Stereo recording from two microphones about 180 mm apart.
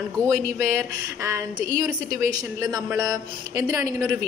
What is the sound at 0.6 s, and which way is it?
A woman's voice, 15° right (ahead or behind).